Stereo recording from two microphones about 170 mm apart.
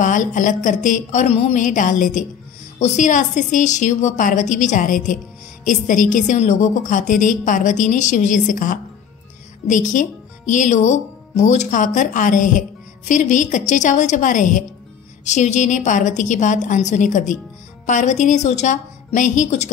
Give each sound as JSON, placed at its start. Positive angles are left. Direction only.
{"t": 0.0, "sound": "speech", "side_deg": 50}